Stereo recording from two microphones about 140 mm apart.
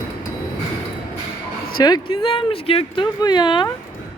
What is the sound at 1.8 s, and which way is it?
Speech, 35° left (ahead or behind).